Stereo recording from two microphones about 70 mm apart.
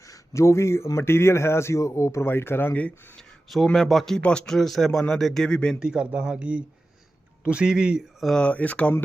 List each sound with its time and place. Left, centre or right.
0.0 s a sound: left
0.9 s speech: left
3.2 s a sound: centre
3.8 s speech: centre
4.2 s speech: centre
5.8 s a man's voice: centre
8.4 s speech: centre